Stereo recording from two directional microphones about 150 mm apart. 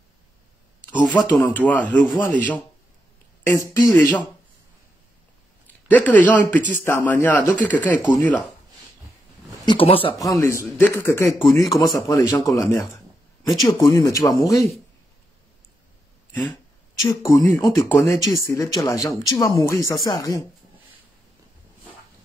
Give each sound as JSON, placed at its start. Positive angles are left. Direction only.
{"t": 1.0, "sound": "a man's voice", "side_deg": 30}
{"t": 1.7, "sound": "speech", "side_deg": 10}
{"t": 3.4, "sound": "a man's voice", "side_deg": 20}
{"t": 5.9, "sound": "speech", "side_deg": 10}
{"t": 9.7, "sound": "speech", "side_deg": 40}
{"t": 10.1, "sound": "a man's voice", "side_deg": 20}
{"t": 17.0, "sound": "a man's voice", "side_deg": 20}